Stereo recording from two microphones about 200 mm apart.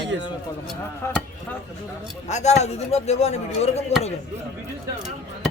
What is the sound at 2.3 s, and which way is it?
A man's voice, 35° left (ahead or behind).